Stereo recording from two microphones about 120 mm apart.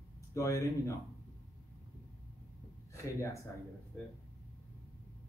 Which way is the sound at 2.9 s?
25° left (ahead or behind).